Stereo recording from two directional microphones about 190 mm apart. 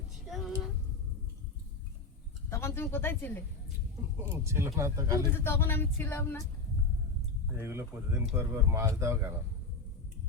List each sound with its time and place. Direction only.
0.3 s a sound: centre (ahead or behind)
2.5 s speech: 15° left (ahead or behind)
4.3 s speech: 15° right (ahead or behind)
5.3 s speech: 10° left (ahead or behind)
7.5 s speech: 10° right (ahead or behind)